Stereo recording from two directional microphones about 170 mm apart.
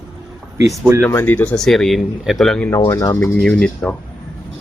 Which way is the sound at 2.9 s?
20° left (ahead or behind).